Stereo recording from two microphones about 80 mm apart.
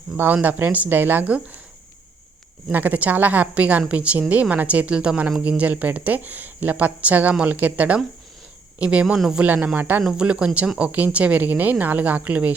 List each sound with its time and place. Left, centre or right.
0.4 s speech: right
2.7 s a woman's voice: right
9.7 s speech: right
10.0 s a woman's voice: centre